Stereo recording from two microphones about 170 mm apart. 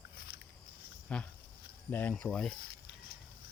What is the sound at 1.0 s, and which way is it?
Speech, 5° left (ahead or behind).